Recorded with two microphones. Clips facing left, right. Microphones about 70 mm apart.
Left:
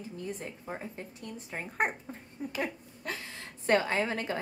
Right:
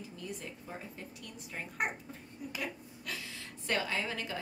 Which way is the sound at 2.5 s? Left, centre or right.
Left.